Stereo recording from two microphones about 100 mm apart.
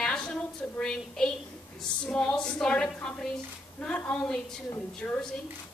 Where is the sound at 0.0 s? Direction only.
10° left (ahead or behind).